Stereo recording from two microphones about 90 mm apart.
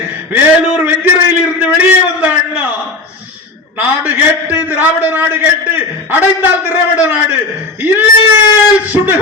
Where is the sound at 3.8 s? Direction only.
20° right (ahead or behind).